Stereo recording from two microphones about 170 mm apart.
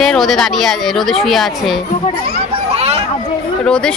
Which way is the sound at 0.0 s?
Centre (ahead or behind).